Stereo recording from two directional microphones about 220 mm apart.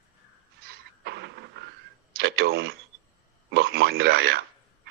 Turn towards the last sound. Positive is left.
turn(degrees=-45)  # may be behind; listen again after turning